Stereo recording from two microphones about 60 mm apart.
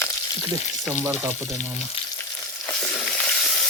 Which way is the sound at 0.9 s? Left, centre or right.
Right.